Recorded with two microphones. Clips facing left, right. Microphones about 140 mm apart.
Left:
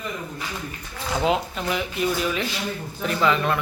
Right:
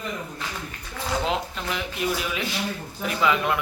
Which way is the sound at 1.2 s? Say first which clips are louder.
Left 8 dB; 5° left (ahead or behind).